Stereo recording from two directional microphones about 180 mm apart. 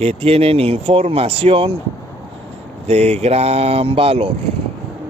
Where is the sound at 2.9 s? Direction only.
35° right (ahead or behind).